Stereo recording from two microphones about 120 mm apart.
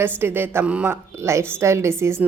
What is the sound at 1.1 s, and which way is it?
A woman's voice, 25° right (ahead or behind).